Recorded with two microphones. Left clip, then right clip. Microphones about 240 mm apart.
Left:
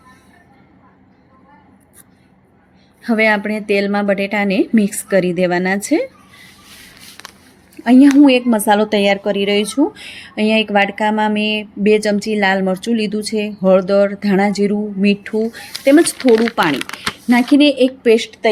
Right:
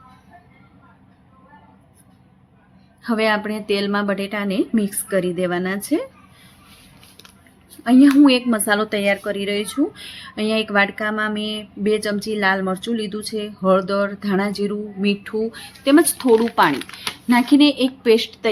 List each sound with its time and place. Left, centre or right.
3.0 s speech: centre
7.9 s speech: centre
17.5 s speech: centre